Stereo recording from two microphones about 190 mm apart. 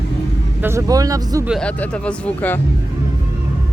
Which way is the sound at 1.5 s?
5° left (ahead or behind).